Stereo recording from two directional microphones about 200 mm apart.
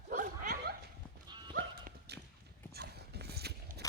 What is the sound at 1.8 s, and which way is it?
Dog, 50° right (ahead or behind).